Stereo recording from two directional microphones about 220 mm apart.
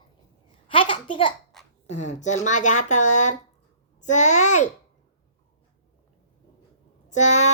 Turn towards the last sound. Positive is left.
turn(degrees=30)  # may be behind; listen again after turning